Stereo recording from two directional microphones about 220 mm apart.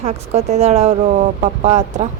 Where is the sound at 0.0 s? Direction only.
30° right (ahead or behind).